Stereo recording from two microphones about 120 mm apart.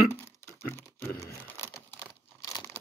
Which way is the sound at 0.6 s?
15° left (ahead or behind).